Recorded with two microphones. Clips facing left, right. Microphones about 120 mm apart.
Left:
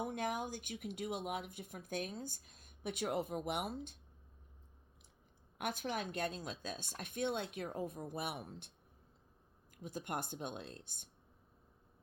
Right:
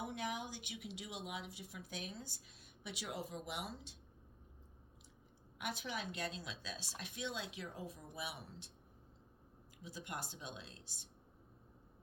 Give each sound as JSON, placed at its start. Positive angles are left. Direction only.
{"t": 0.0, "sound": "speech", "side_deg": 50}
{"t": 5.5, "sound": "speech", "side_deg": 50}
{"t": 9.7, "sound": "speech", "side_deg": 50}